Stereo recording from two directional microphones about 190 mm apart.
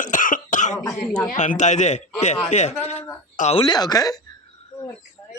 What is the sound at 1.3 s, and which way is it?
A man's voice, 40° left (ahead or behind).